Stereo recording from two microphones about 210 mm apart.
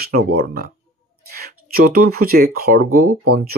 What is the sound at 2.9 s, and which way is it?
Speech, 90° right.